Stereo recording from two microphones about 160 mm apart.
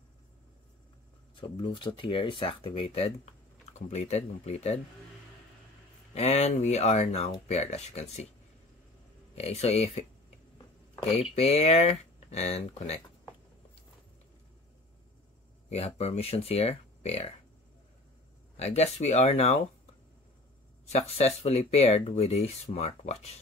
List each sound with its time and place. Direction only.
1.3 s speech: 30° left (ahead or behind)
6.1 s speech: 40° left (ahead or behind)
9.3 s speech: 40° left (ahead or behind)
11.3 s speech: 40° left (ahead or behind)
15.7 s speech: 40° left (ahead or behind)
18.6 s speech: 45° left (ahead or behind)
20.9 s speech: 40° left (ahead or behind)